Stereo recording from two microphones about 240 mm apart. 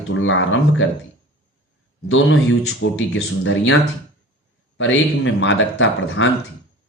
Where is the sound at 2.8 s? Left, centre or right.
Left.